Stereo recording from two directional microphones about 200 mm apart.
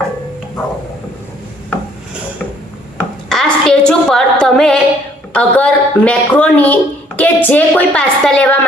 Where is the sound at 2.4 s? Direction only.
Centre (ahead or behind).